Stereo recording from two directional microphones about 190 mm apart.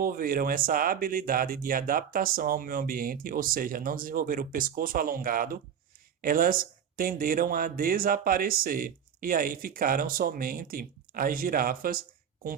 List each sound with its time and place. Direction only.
0.0 s speech: 50° right (ahead or behind)